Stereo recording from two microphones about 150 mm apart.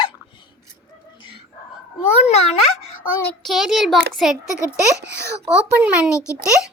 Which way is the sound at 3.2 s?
5° left (ahead or behind).